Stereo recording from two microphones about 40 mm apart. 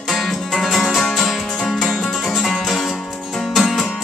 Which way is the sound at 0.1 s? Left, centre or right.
Centre.